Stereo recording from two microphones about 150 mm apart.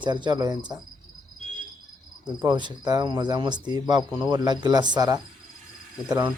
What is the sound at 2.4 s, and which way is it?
Speech, 25° right (ahead or behind).